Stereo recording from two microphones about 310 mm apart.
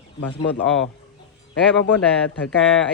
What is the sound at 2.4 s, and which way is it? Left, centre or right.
Speech, centre.